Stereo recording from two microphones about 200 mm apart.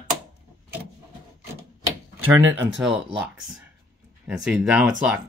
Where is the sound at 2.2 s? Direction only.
75° right (ahead or behind).